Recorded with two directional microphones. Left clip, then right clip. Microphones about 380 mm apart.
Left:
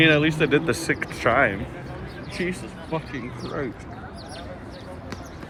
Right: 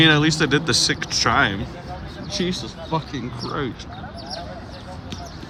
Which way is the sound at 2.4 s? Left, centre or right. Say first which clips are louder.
Right 2 dB; right.